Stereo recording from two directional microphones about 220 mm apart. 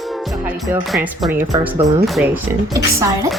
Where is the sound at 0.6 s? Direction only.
Centre (ahead or behind).